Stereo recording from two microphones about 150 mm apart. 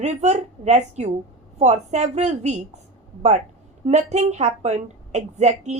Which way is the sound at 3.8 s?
50° right (ahead or behind).